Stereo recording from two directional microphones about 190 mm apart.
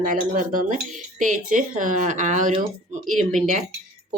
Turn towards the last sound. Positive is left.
turn(degrees=-40)  # may be behind; listen again after turning